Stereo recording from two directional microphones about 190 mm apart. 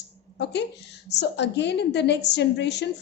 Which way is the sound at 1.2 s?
65° left (ahead or behind).